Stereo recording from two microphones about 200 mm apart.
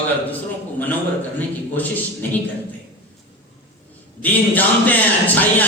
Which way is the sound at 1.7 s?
10° left (ahead or behind).